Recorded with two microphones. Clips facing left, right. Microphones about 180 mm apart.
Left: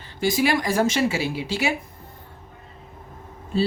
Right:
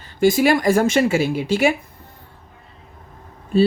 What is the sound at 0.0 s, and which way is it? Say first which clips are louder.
A woman's voice: right 6 dB; 50° right (ahead or behind).